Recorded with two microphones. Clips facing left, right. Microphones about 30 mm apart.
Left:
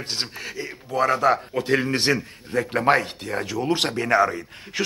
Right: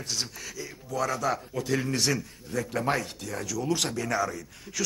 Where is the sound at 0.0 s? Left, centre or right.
Left.